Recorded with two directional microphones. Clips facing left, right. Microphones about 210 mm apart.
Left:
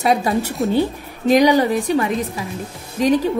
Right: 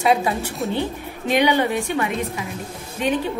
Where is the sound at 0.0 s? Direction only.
40° left (ahead or behind).